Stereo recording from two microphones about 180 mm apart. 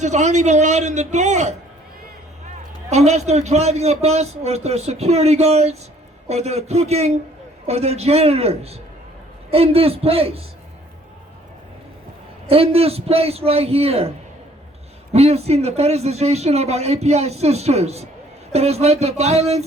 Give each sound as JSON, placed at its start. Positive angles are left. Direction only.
{"t": 0.0, "sound": "speech", "side_deg": -40}
{"t": 2.9, "sound": "speech", "side_deg": -40}
{"t": 12.5, "sound": "speech", "side_deg": -30}
{"t": 15.1, "sound": "speech", "side_deg": -35}